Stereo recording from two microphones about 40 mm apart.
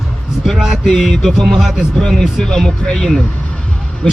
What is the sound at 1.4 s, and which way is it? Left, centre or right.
Speech, centre.